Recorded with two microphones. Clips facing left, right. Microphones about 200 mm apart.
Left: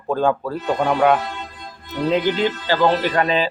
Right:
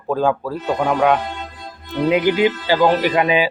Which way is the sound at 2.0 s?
10° right (ahead or behind).